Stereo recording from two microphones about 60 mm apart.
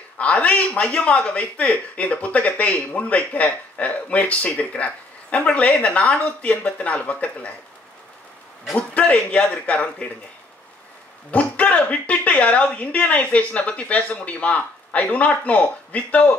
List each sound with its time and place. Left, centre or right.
0.2 s a woman's voice: left
8.9 s a woman's voice: left
11.3 s a woman's voice: left